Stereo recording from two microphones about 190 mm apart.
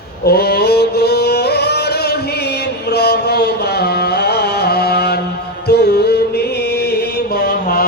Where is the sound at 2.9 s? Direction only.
60° left (ahead or behind).